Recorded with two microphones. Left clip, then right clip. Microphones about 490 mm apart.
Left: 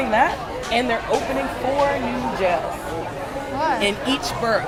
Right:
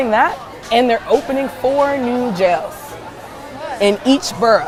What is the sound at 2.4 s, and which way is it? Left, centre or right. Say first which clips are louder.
Speech: right 6 dB; right.